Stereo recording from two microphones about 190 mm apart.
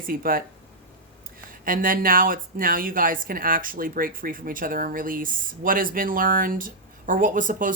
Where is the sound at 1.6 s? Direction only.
45° right (ahead or behind).